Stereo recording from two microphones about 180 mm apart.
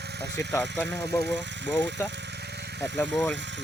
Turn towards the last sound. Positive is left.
turn(degrees=5)  # may be behind; listen again after turning